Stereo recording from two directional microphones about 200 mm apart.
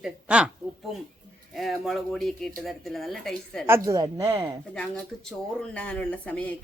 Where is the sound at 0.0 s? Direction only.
5° right (ahead or behind).